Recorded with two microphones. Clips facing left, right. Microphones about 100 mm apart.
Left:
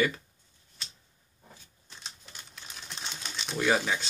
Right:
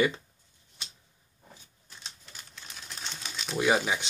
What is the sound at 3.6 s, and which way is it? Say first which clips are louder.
Speech: right 1 dB; 15° right (ahead or behind).